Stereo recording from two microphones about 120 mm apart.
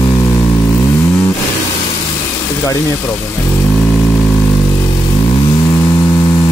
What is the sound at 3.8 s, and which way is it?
Vehicle, 15° left (ahead or behind).